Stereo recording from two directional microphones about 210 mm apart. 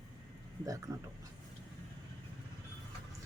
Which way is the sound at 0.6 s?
15° right (ahead or behind).